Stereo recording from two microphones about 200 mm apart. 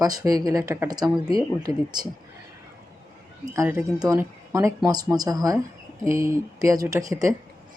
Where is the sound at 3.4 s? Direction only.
15° right (ahead or behind).